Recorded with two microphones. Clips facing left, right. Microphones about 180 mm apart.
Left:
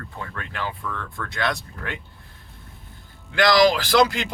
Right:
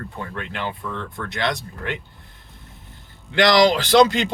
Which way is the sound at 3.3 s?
25° right (ahead or behind).